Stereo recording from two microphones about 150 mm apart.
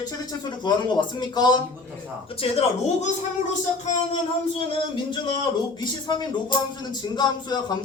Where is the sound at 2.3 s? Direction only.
40° left (ahead or behind).